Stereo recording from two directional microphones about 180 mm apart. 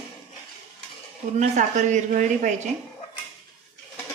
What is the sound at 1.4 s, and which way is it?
Speech, 40° right (ahead or behind).